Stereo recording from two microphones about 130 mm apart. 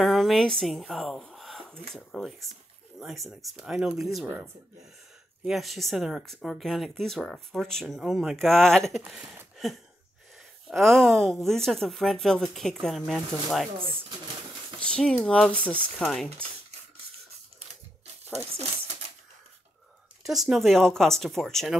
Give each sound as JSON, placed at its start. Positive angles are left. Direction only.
{"t": 0.0, "sound": "a woman's voice", "side_deg": 0}
{"t": 5.4, "sound": "speech", "side_deg": 0}
{"t": 9.6, "sound": "a sound", "side_deg": 0}
{"t": 10.7, "sound": "speech", "side_deg": 5}
{"t": 14.9, "sound": "speech", "side_deg": 5}
{"t": 18.3, "sound": "speech", "side_deg": -55}
{"t": 20.2, "sound": "speech", "side_deg": 0}